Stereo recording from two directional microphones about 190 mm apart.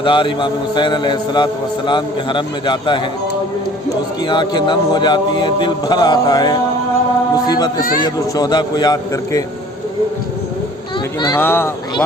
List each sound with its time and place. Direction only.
0.0 s a man's voice: 25° left (ahead or behind)
4.3 s a man's voice: 25° left (ahead or behind)
11.3 s speech: 10° left (ahead or behind)